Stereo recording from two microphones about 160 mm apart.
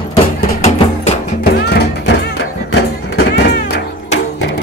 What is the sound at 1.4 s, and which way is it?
Music, 85° left.